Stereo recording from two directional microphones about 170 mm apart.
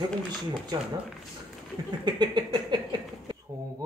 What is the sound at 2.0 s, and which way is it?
Speech, 25° right (ahead or behind).